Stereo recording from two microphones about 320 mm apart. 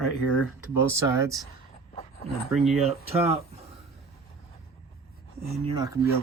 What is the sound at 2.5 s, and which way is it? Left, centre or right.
Speech, centre.